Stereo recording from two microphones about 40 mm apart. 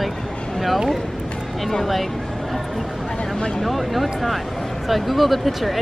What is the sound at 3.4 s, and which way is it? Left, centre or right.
Speech, centre.